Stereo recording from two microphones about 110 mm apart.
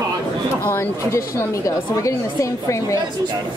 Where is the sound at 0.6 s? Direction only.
25° left (ahead or behind).